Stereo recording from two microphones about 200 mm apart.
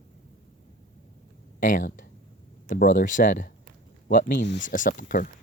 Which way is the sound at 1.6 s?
40° left (ahead or behind).